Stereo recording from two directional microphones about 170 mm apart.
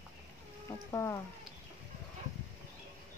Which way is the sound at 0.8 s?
20° left (ahead or behind).